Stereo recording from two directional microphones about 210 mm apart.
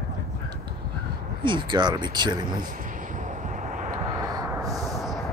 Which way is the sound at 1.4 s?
20° right (ahead or behind).